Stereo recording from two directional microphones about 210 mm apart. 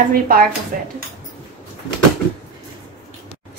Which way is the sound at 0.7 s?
40° right (ahead or behind).